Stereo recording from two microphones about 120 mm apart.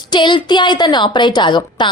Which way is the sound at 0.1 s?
40° left (ahead or behind).